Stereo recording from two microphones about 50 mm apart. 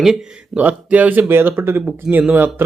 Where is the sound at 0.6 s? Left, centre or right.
Right.